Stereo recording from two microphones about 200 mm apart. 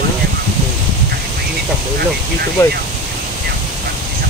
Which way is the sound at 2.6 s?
15° left (ahead or behind).